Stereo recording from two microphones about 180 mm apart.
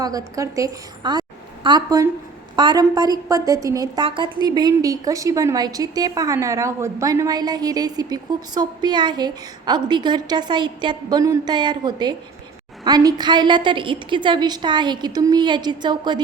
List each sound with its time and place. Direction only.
0.0 s a woman's voice: 20° right (ahead or behind)